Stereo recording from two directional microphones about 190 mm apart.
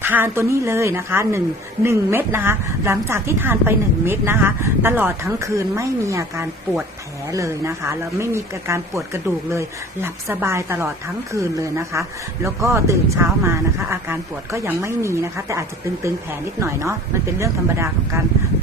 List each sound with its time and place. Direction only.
0.0 s a woman's voice: 10° right (ahead or behind)